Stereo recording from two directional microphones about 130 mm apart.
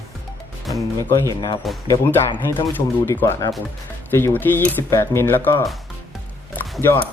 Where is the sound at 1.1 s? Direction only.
25° left (ahead or behind).